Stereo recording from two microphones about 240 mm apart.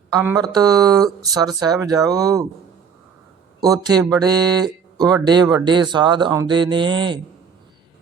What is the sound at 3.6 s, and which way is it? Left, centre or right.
Speech, centre.